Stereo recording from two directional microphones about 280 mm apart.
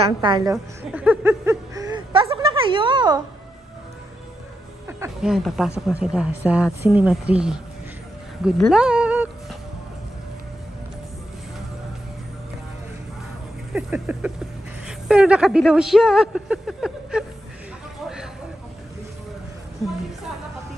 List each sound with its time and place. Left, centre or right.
0.0 s a woman's voice: centre
4.8 s a woman's voice: centre
13.7 s a woman's voice: centre
18.0 s a sound: centre